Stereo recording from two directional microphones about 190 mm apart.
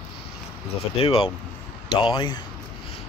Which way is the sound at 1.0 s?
30° left (ahead or behind).